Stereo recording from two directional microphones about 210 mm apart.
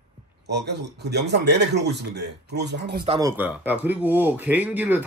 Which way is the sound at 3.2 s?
10° right (ahead or behind).